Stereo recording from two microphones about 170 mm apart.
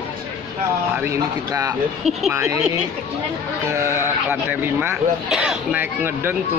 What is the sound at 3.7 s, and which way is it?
A man's voice, 15° right (ahead or behind).